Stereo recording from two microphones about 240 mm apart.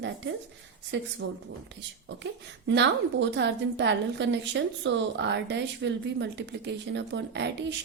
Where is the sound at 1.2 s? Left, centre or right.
Right.